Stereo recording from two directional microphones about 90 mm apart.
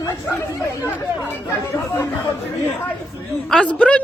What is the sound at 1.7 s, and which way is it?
Chatter, 25° left (ahead or behind).